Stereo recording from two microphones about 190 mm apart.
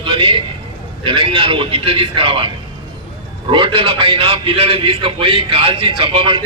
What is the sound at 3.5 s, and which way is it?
A man's voice, 25° right (ahead or behind).